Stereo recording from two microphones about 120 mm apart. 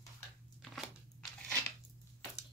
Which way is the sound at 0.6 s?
Centre (ahead or behind).